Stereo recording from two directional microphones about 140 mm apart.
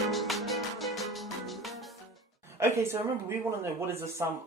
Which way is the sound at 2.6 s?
15° right (ahead or behind).